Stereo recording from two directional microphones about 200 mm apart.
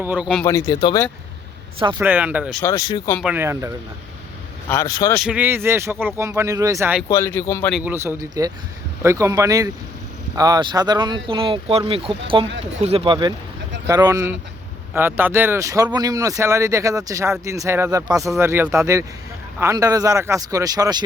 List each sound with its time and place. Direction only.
0.0 s speech: 10° right (ahead or behind)
0.4 s speech: 15° left (ahead or behind)
2.0 s speech: 10° right (ahead or behind)
2.6 s speech: 15° left (ahead or behind)
3.2 s speech: 10° right (ahead or behind)
4.7 s speech: 15° left (ahead or behind)
5.1 s speech: 5° right (ahead or behind)
7.1 s speech: 15° left (ahead or behind)
7.7 s speech: 5° right (ahead or behind)